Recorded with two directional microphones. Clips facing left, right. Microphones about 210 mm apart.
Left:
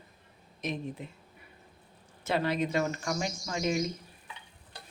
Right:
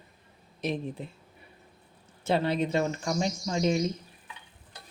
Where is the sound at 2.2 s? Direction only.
30° right (ahead or behind).